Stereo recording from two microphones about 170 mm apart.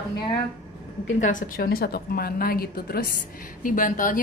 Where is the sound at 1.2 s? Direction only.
55° left (ahead or behind).